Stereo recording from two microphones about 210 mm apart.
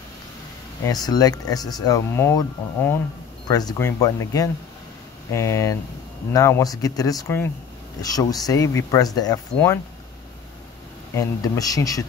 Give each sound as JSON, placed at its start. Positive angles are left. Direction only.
{"t": 0.8, "sound": "speech", "side_deg": 20}
{"t": 11.1, "sound": "speech", "side_deg": 15}